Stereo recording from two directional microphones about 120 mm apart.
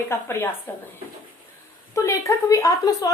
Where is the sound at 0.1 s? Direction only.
20° left (ahead or behind).